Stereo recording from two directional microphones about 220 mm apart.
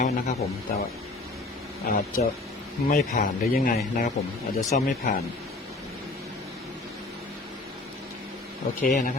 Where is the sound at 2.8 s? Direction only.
35° left (ahead or behind).